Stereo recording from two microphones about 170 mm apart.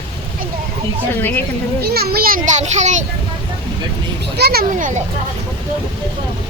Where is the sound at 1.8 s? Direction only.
70° right (ahead or behind); by 3.0 s 45° right (ahead or behind).